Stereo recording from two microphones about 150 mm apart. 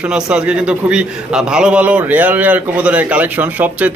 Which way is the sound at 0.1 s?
5° right (ahead or behind).